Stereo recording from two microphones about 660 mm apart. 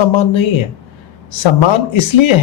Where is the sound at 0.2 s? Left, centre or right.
Left.